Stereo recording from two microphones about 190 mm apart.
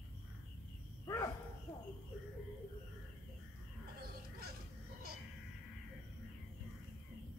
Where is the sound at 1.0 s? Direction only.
15° left (ahead or behind).